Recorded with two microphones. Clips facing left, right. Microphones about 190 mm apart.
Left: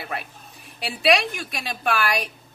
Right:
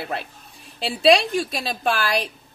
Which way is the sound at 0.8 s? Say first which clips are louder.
Right 4 dB; 30° right (ahead or behind).